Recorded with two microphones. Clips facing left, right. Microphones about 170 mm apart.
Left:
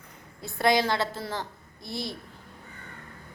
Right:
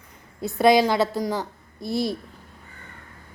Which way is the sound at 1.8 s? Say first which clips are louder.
Right 10 dB; 20° left (ahead or behind).